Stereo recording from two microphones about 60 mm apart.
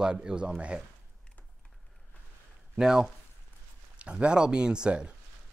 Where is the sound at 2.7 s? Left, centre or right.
Centre.